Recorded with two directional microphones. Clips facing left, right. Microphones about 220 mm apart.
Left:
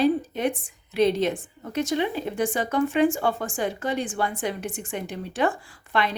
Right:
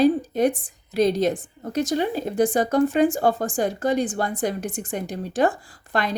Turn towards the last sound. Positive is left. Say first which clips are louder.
# even
turn(degrees=-40)  # may be behind; listen again after turning